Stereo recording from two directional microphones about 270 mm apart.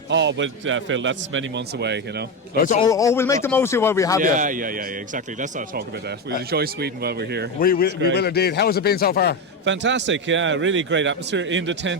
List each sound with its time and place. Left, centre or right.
0.1 s a man's voice: right
2.6 s a man's voice: left
2.8 s speech: centre
4.2 s a man's voice: right
7.6 s a man's voice: left
9.6 s a man's voice: right